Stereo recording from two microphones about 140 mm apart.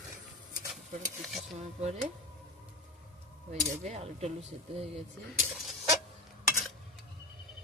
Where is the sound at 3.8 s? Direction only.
50° right (ahead or behind).